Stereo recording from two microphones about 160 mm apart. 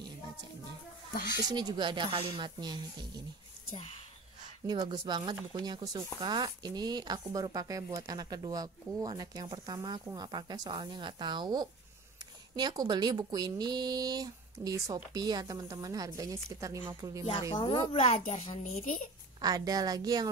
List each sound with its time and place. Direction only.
1.4 s speech: 25° right (ahead or behind)
4.6 s speech: 25° right (ahead or behind)
17.3 s speech: 30° left (ahead or behind); by 19.0 s 50° left (ahead or behind)
19.4 s speech: 25° right (ahead or behind)